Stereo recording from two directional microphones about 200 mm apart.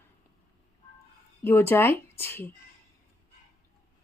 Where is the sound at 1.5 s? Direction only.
10° left (ahead or behind).